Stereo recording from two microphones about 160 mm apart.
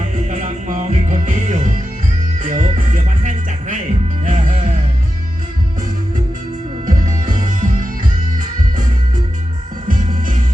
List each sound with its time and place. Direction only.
0.3 s music: 55° right (ahead or behind)
6.8 s music: 55° right (ahead or behind)
9.9 s music: 55° right (ahead or behind)